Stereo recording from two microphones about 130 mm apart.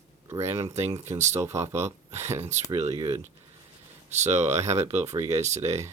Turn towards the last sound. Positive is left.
turn(degrees=-20)  # may be behind; listen again after turning